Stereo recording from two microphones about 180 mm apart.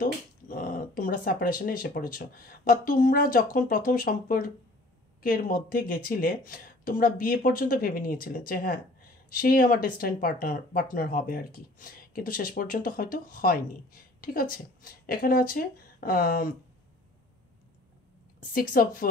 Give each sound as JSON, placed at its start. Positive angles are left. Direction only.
{"t": 0.0, "sound": "speech", "side_deg": 50}
{"t": 18.5, "sound": "speech", "side_deg": 50}